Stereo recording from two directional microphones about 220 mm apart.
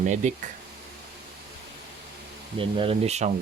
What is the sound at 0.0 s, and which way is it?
Speech, 35° right (ahead or behind).